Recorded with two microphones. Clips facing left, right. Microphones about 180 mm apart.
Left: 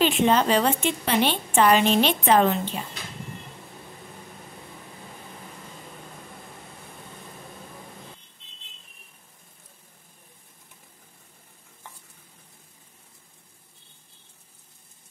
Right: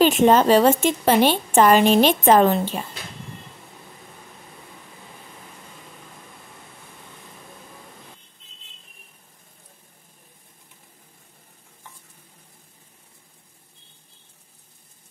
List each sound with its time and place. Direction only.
0.0 s a woman's voice: 45° right (ahead or behind)